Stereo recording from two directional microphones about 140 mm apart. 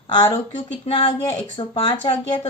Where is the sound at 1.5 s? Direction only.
40° left (ahead or behind).